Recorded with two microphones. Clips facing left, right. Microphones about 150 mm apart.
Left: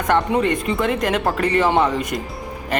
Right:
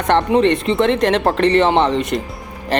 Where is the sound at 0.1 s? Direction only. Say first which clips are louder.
Right 4 dB; 25° right (ahead or behind).